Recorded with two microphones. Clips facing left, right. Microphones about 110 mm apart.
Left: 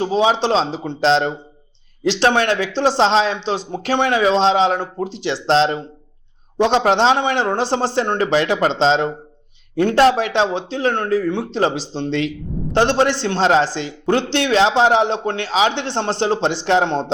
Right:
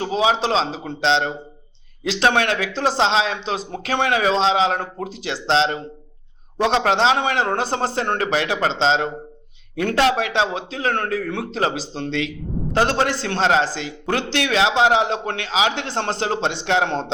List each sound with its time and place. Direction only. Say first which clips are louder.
0.0 s speech: left 3 dB; 35° left (ahead or behind)
6.8 s speech: left 3 dB; 35° left (ahead or behind)